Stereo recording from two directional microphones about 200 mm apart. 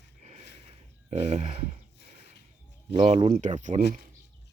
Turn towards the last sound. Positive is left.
turn(degrees=-35)  # may be behind; listen again after turning